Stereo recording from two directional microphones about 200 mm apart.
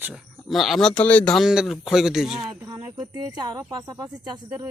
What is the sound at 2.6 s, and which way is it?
Speech, 20° right (ahead or behind).